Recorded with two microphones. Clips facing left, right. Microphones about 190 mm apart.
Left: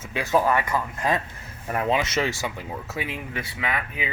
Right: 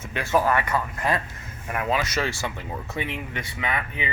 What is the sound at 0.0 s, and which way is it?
Speech, 15° left (ahead or behind).